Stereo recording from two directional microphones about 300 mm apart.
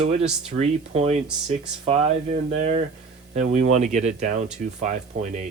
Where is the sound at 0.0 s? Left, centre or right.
Right.